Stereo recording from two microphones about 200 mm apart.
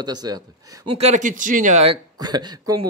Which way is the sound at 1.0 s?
35° right (ahead or behind).